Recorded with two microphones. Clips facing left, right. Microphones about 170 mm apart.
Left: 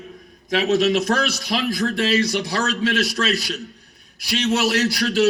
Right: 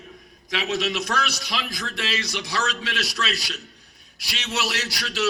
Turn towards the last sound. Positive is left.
turn(degrees=50)  # may be behind; listen again after turning